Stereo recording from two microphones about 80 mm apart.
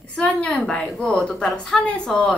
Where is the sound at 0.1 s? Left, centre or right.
Centre.